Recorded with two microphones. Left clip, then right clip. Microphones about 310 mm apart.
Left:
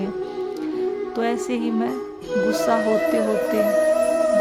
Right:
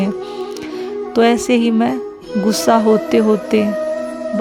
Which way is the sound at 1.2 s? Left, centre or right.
Right.